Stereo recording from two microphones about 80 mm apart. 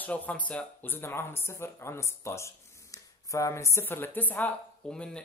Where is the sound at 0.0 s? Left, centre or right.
Centre; by 3.8 s left.